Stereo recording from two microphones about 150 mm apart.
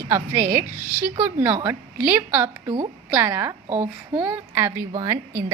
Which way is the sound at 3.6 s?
40° right (ahead or behind).